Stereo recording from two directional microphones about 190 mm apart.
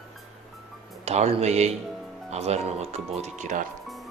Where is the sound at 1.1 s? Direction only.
35° right (ahead or behind).